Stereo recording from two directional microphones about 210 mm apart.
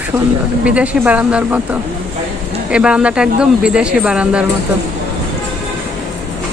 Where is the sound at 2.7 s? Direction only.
5° right (ahead or behind).